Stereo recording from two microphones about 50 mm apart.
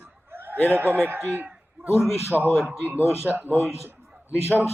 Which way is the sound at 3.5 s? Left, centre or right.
Left.